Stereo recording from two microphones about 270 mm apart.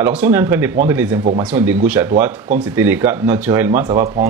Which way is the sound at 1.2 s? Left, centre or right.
Right.